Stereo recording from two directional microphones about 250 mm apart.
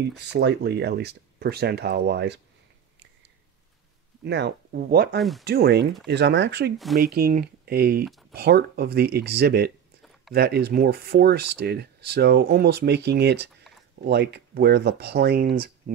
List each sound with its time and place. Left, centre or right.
0.3 s speech: right
4.2 s speech: right
8.0 s speech: centre
8.3 s speech: right